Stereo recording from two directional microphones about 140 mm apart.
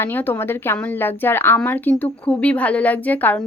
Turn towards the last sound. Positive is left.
turn(degrees=10)  # may be behind; listen again after turning